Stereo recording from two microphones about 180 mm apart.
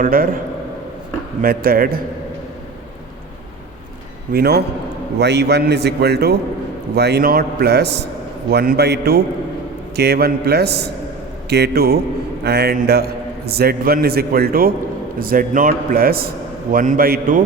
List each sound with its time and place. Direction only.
0.0 s a man's voice: 55° right (ahead or behind)
1.4 s a man's voice: 55° right (ahead or behind)
4.3 s a man's voice: 60° right (ahead or behind)
5.2 s a man's voice: 70° right (ahead or behind); by 17.4 s 50° right (ahead or behind)